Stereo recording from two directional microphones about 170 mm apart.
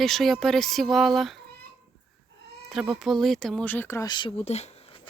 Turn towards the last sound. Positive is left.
turn(degrees=35)  # may be behind; listen again after turning